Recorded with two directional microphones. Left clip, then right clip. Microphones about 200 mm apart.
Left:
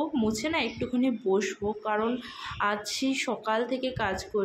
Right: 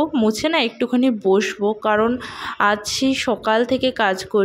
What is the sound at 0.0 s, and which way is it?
Speech, 35° right (ahead or behind).